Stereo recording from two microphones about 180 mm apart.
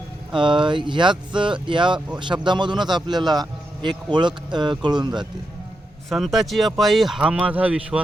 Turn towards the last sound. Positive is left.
turn(degrees=-5)  # may be behind; listen again after turning